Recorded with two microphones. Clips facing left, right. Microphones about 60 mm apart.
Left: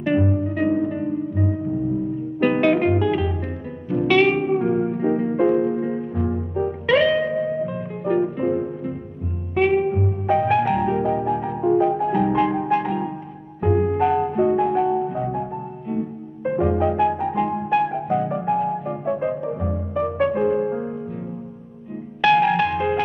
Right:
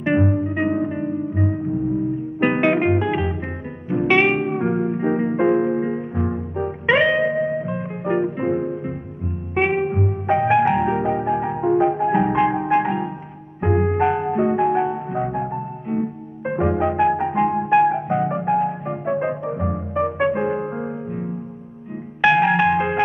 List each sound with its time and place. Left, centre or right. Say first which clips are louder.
0.4 s music: even; right
2.4 s music: even; right
13.7 s music: even; right
13.9 s music: even; right
22.2 s music: right 1 dB; right